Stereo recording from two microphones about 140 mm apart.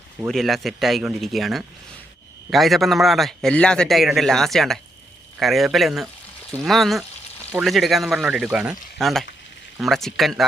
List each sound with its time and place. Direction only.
0.3 s a man's voice: centre (ahead or behind)